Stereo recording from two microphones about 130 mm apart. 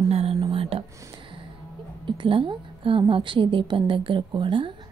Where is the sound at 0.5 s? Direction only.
45° right (ahead or behind).